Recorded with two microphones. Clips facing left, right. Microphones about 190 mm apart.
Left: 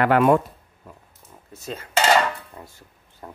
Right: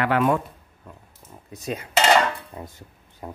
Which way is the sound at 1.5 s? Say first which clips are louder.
Right 3 dB; 15° right (ahead or behind).